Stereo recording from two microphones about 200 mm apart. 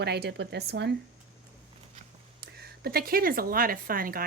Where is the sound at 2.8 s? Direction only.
45° right (ahead or behind).